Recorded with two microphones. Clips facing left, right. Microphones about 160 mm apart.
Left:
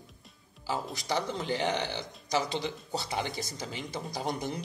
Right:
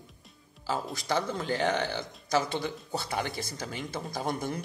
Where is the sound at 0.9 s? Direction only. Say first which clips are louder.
Right 2 dB; 15° left (ahead or behind).